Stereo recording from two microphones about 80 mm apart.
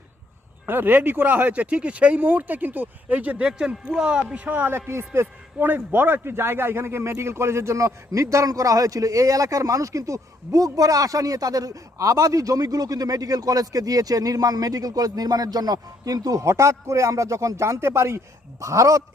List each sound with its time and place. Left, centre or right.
0.6 s a man's voice: right